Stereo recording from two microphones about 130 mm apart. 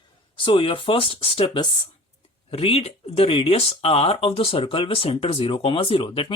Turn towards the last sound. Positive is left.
turn(degrees=40)  # may be behind; listen again after turning